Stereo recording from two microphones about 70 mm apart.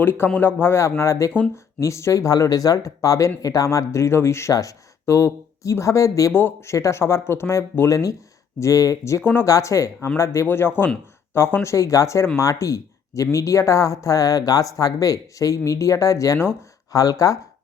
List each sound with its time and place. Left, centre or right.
0.0 s speech: left
6.3 s speech: left
9.2 s speech: left
9.5 s speech: left
10.4 s speech: left